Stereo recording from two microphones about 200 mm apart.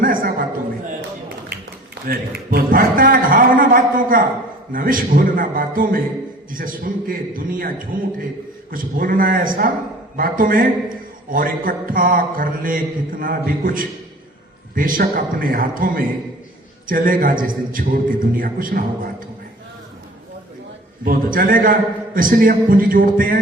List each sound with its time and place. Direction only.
0.0 s a sound: 45° right (ahead or behind)
2.0 s mantra: 50° right (ahead or behind)
8.7 s mantra: 45° right (ahead or behind)
21.0 s mantra: 45° right (ahead or behind)